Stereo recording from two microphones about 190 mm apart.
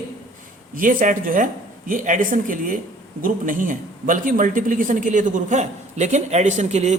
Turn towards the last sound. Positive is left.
turn(degrees=-35)  # may be behind; listen again after turning